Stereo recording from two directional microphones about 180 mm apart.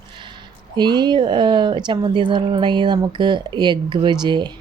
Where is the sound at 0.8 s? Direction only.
25° right (ahead or behind).